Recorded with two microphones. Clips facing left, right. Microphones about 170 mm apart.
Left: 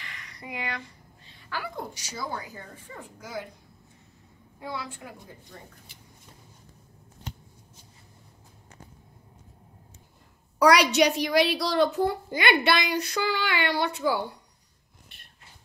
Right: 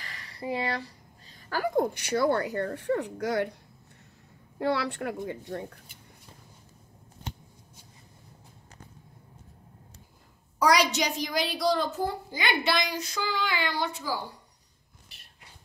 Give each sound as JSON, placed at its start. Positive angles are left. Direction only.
{"t": 0.0, "sound": "speech", "side_deg": -35}
{"t": 4.6, "sound": "a woman's voice", "side_deg": -70}
{"t": 10.6, "sound": "a child's voice", "side_deg": 65}